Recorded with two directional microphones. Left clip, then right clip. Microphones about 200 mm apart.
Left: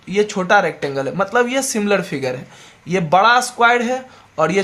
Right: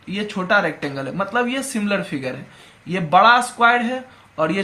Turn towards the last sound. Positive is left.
turn(degrees=50)  # may be behind; listen again after turning